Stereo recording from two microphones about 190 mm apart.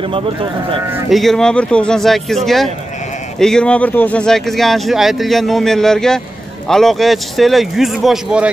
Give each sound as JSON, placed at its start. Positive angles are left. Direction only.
{"t": 0.1, "sound": "speech", "side_deg": -30}
{"t": 1.1, "sound": "speech", "side_deg": 0}